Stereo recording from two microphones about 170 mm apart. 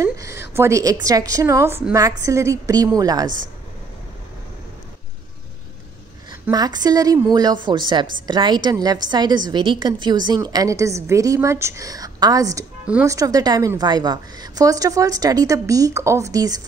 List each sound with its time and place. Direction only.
0.0 s a sound: 20° right (ahead or behind)
0.6 s a woman's voice: 15° right (ahead or behind)
6.5 s a woman's voice: 25° right (ahead or behind)